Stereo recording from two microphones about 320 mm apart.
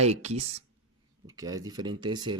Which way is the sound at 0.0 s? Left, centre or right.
Centre.